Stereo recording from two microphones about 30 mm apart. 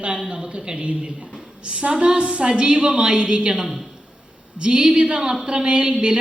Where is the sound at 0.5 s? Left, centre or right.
Right.